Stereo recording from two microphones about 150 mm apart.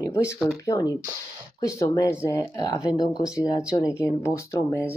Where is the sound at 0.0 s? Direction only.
20° left (ahead or behind).